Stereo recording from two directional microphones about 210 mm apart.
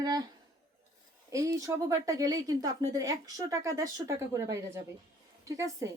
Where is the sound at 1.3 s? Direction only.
15° right (ahead or behind).